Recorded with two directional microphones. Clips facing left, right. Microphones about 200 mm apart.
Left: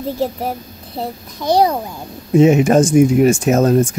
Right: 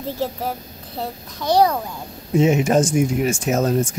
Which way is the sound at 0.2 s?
15° left (ahead or behind).